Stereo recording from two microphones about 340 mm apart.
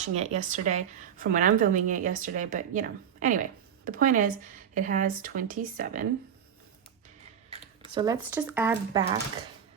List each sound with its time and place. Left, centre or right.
0.0 s speech: centre
7.5 s speech: centre